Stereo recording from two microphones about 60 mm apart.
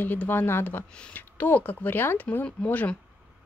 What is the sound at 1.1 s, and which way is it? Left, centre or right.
A woman's voice, left.